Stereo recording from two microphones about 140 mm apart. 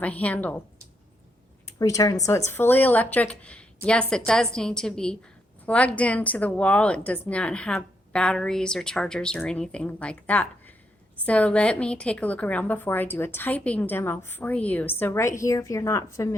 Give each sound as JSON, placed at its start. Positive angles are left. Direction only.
{"t": 0.0, "sound": "a woman's voice", "side_deg": 10}
{"t": 1.8, "sound": "a woman's voice", "side_deg": 25}